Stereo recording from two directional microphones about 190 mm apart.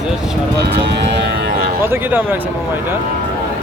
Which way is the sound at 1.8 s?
10° right (ahead or behind).